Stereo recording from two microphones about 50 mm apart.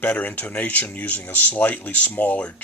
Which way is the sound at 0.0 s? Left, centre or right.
Left.